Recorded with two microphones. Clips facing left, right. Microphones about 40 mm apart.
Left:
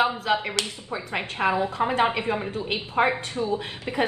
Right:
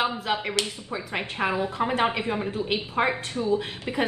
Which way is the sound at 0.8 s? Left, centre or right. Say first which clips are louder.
Left 1 dB; left.